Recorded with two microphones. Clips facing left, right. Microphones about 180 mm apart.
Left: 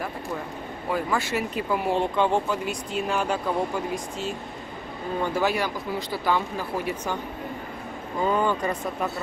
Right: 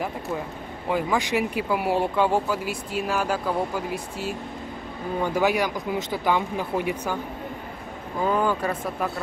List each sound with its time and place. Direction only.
0.8 s speech: 15° right (ahead or behind)
5.2 s speech: 15° right (ahead or behind)
8.2 s speech: 5° right (ahead or behind)